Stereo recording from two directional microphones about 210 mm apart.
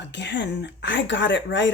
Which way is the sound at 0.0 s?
55° left (ahead or behind).